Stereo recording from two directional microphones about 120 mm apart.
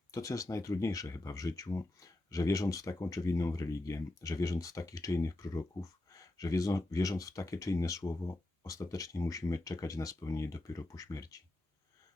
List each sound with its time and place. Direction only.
0.1 s speech: 30° left (ahead or behind)